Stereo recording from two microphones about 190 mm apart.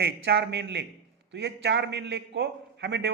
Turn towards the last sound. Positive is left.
turn(degrees=-65)  # may be behind; listen again after turning